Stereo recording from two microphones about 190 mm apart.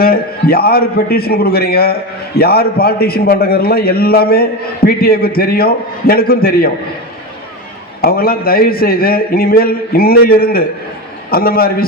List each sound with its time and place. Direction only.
0.0 s a man's voice: 50° left (ahead or behind)
8.0 s a man's voice: 50° left (ahead or behind)